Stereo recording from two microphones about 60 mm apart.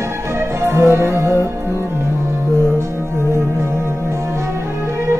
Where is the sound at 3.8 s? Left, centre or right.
Right.